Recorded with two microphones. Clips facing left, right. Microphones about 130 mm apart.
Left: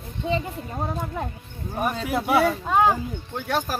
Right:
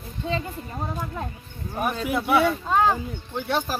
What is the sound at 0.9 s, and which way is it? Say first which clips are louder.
Speech: left 2 dB; 25° left (ahead or behind).